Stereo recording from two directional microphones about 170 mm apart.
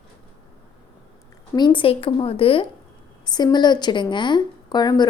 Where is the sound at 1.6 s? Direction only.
30° left (ahead or behind).